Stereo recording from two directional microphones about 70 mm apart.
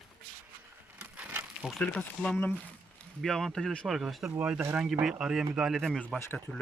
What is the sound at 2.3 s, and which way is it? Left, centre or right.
Speech, left.